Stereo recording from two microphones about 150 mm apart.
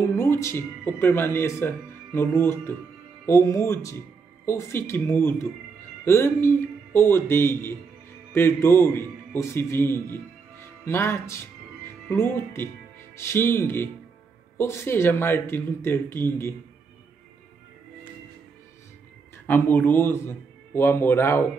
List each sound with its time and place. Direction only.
0.2 s speech: 15° left (ahead or behind)
19.4 s speech: 10° left (ahead or behind)